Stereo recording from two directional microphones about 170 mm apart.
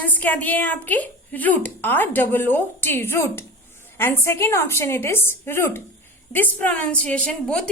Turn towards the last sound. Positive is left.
turn(degrees=5)  # may be behind; listen again after turning